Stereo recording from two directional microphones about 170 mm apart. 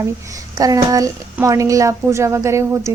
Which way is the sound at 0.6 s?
20° right (ahead or behind).